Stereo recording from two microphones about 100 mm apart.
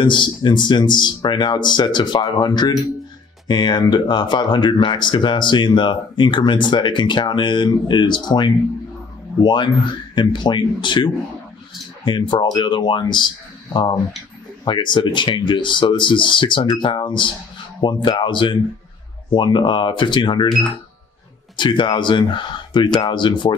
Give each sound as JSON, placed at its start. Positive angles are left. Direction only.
{"t": 0.0, "sound": "speech", "side_deg": 50}
{"t": 14.6, "sound": "speech", "side_deg": 50}
{"t": 21.5, "sound": "speech", "side_deg": 50}